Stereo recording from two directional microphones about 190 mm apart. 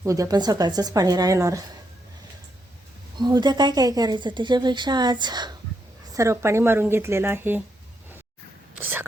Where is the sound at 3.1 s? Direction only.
20° right (ahead or behind).